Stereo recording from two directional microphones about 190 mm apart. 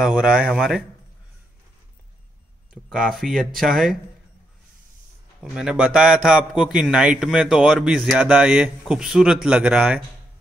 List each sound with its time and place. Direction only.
0.0 s a man's voice: 5° right (ahead or behind)
2.7 s a man's voice: centre (ahead or behind)
5.4 s a man's voice: 5° right (ahead or behind)